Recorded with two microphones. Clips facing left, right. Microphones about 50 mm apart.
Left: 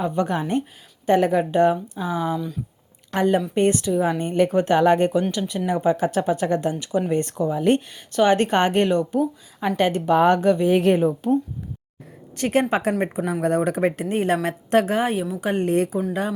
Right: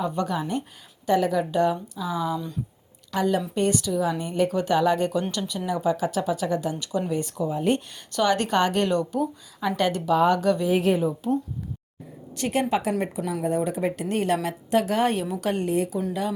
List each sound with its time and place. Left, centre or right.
0.0 s speech: left
6.7 s speech: left
7.1 s speech: left
8.1 s a woman's voice: left
10.1 s speech: left
10.4 s speech: left
10.7 s speech: left
12.4 s speech: left
13.4 s speech: left
14.1 s speech: left
14.4 s speech: left
15.0 s a woman's voice: centre
15.6 s speech: left